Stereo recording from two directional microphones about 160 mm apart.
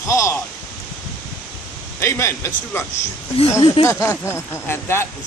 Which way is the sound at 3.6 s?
30° left (ahead or behind).